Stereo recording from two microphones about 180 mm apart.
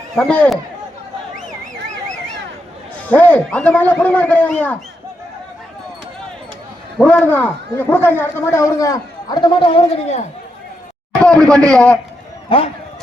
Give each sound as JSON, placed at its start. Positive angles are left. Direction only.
{"t": 0.2, "sound": "a man's voice", "side_deg": 5}
{"t": 3.0, "sound": "a man's voice", "side_deg": 10}
{"t": 7.0, "sound": "a man's voice", "side_deg": 10}
{"t": 11.2, "sound": "a man's voice", "side_deg": 5}
{"t": 12.5, "sound": "a man's voice", "side_deg": 30}